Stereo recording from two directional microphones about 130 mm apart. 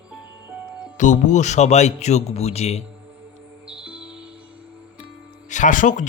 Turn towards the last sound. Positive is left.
turn(degrees=80)